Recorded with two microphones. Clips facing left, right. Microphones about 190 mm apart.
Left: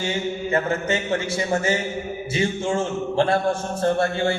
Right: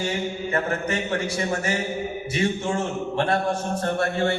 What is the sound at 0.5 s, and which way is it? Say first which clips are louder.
A man's voice: left 3 dB; 25° left (ahead or behind).